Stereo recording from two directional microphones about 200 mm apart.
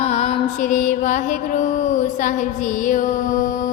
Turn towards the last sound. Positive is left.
turn(degrees=40)  # may be behind; listen again after turning